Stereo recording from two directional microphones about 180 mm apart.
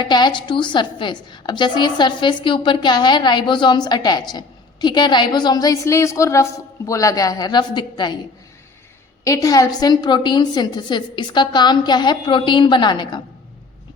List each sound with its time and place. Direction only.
0.1 s a woman's voice: 25° left (ahead or behind)
9.2 s a woman's voice: 20° left (ahead or behind)